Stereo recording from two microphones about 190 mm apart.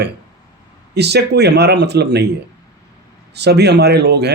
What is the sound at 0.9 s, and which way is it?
A man's voice, 60° right (ahead or behind).